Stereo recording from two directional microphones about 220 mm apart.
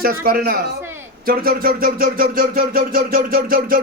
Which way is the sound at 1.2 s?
40° right (ahead or behind).